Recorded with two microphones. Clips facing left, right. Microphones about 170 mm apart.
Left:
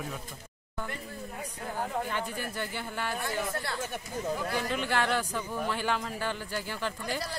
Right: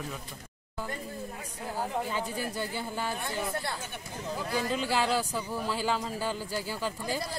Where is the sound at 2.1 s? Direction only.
10° right (ahead or behind).